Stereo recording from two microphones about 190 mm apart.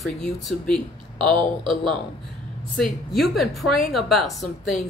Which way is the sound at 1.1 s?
25° right (ahead or behind).